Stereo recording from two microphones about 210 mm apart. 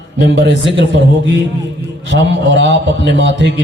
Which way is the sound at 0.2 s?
55° right (ahead or behind).